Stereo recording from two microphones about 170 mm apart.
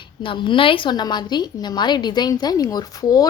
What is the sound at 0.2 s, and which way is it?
A woman's voice, 30° left (ahead or behind).